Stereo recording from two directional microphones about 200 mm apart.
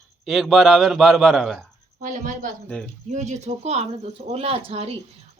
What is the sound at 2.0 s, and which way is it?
Speech, 40° right (ahead or behind).